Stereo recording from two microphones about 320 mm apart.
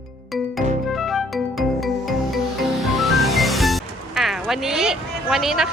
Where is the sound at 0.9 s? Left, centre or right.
Centre.